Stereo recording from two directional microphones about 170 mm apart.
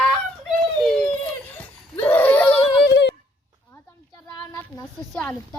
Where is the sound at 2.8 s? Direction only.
90° left.